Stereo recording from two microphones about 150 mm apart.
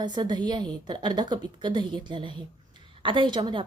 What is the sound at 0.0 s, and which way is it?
A woman's voice, 30° right (ahead or behind).